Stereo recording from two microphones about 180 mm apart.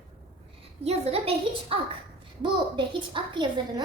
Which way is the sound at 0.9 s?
35° right (ahead or behind).